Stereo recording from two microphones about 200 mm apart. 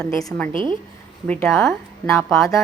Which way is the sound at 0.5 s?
25° right (ahead or behind).